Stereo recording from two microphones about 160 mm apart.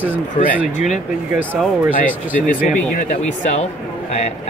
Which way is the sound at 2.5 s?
55° left (ahead or behind).